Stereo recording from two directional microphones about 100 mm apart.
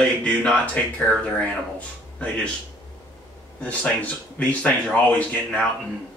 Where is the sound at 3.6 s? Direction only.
15° left (ahead or behind).